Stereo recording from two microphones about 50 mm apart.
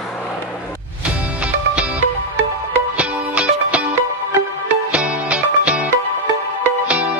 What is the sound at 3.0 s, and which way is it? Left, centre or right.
Music, right.